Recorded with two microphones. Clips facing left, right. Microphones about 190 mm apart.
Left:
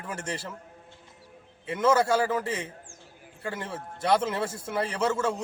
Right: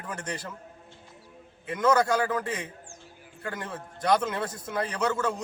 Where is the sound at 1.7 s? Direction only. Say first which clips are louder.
Left 1 dB; 25° left (ahead or behind).